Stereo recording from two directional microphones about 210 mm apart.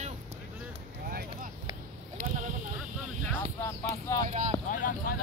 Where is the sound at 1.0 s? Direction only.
45° right (ahead or behind).